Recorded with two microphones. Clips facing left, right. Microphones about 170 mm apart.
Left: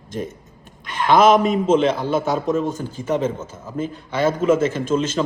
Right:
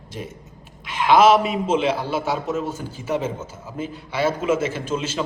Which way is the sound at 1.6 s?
10° right (ahead or behind).